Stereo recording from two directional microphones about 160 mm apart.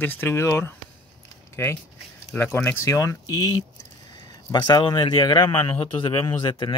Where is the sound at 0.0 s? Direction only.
10° left (ahead or behind).